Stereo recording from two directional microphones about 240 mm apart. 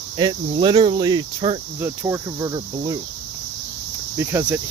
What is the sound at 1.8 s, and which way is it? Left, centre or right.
Cricket, centre.